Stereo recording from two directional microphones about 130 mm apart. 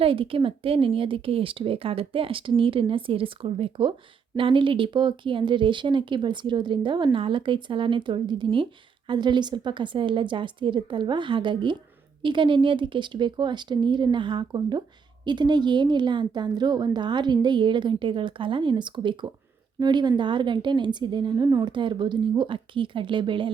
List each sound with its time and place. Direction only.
0.0 s speech: 45° right (ahead or behind)